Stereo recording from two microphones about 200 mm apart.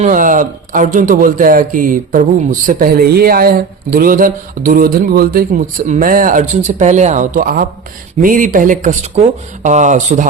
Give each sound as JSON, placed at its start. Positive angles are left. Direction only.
{"t": 0.0, "sound": "a man's voice", "side_deg": -40}